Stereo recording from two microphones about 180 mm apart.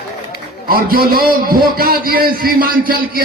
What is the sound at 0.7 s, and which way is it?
A man's voice, 55° right (ahead or behind).